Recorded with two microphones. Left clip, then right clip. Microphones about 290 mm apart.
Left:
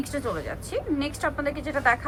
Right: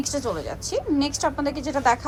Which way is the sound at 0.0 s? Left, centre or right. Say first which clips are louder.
Right 3 dB; centre.